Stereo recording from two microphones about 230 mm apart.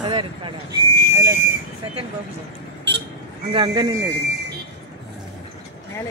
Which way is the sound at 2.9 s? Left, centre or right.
Right.